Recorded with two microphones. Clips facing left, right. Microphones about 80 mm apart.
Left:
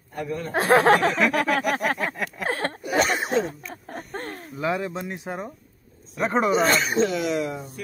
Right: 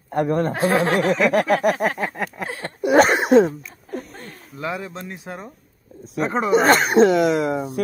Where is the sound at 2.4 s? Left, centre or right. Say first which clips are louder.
Left 4 dB; left.